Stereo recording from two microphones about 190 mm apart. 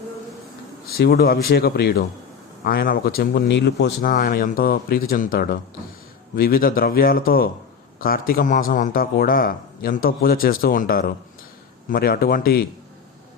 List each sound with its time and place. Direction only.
0.9 s a man's voice: 55° left (ahead or behind)
4.1 s a man's voice: 45° left (ahead or behind)